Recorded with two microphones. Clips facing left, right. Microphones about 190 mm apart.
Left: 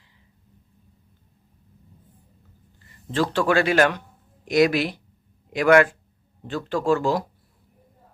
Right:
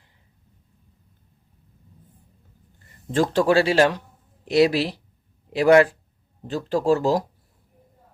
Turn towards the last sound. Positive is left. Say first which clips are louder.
# right 2 dB
turn(degrees=-40)  # may be behind; listen again after turning